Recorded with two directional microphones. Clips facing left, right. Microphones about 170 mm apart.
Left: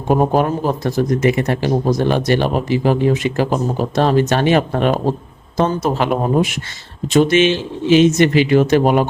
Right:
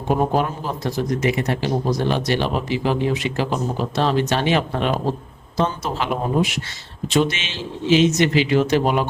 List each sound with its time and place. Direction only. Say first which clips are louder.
0.1 s a man's voice: left 5 dB; 50° left (ahead or behind)